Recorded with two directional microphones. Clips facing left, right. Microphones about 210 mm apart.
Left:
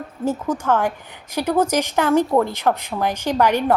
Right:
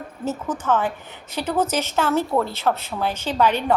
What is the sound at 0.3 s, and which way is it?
A woman's voice, 10° left (ahead or behind).